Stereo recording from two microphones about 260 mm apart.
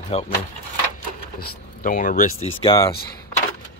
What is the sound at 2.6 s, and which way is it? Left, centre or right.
Speech, centre.